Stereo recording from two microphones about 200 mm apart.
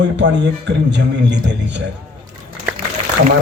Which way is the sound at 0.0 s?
60° right (ahead or behind).